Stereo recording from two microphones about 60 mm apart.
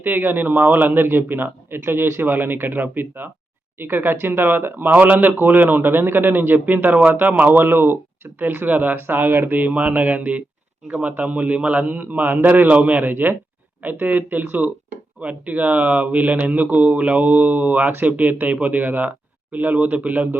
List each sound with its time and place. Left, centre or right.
0.0 s speech: right